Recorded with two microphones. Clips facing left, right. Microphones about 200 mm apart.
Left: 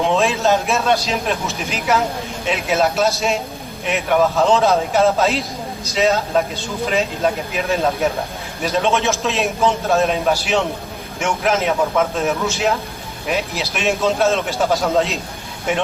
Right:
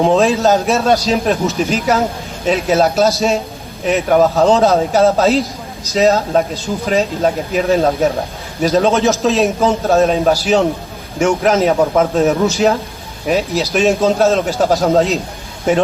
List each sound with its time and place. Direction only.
0.0 s speech: 35° right (ahead or behind)